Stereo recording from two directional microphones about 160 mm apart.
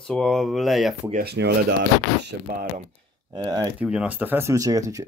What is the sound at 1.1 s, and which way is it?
Speech, 80° right.